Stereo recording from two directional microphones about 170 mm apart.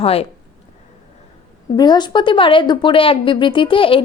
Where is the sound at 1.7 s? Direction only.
25° left (ahead or behind).